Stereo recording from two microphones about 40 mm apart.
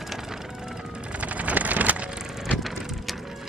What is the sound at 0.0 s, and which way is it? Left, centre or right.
Vehicle, centre.